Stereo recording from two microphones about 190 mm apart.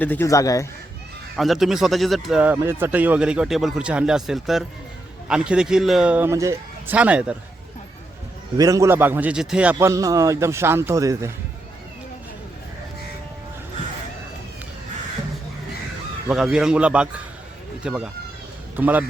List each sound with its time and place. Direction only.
0.0 s a man's voice: 10° left (ahead or behind)
1.4 s a man's voice: centre (ahead or behind)
8.5 s a man's voice: 20° right (ahead or behind)
9.7 s a man's voice: 15° right (ahead or behind)
16.3 s a man's voice: 5° right (ahead or behind)